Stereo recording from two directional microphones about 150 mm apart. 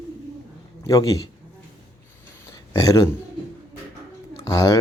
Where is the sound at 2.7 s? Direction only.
25° left (ahead or behind).